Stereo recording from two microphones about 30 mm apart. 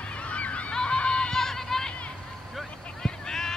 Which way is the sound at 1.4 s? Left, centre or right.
Centre.